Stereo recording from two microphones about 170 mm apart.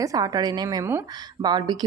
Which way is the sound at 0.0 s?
20° right (ahead or behind).